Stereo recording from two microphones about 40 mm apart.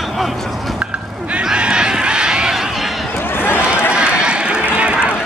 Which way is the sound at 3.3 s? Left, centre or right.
Left.